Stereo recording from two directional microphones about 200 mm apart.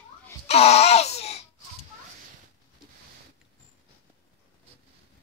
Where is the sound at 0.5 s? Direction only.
30° left (ahead or behind).